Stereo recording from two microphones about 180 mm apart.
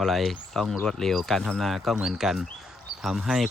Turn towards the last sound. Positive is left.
turn(degrees=-5)  # may be behind; listen again after turning